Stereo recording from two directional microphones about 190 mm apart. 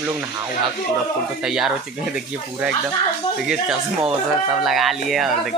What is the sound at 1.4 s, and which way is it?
Speech, centre (ahead or behind).